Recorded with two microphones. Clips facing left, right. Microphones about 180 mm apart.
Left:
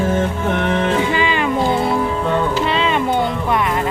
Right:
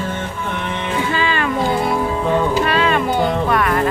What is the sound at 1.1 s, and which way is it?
Music, 15° left (ahead or behind).